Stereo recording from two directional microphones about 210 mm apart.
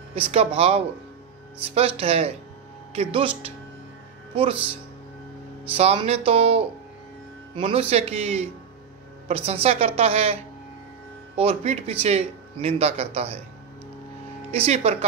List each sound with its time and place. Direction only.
0.1 s speech: 30° right (ahead or behind)
5.8 s speech: 30° right (ahead or behind)
14.5 s speech: 30° right (ahead or behind)